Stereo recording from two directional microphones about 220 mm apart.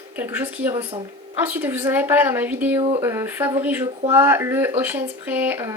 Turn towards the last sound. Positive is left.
turn(degrees=-10)  # may be behind; listen again after turning